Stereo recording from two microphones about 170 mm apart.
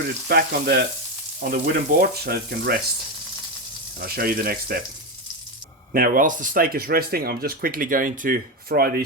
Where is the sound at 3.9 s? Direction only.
60° right (ahead or behind).